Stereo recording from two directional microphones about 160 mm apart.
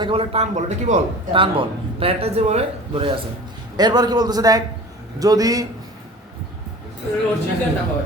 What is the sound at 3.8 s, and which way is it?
A man's voice, 25° right (ahead or behind).